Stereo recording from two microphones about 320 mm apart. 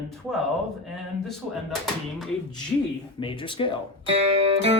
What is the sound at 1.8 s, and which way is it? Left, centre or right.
Speech, centre.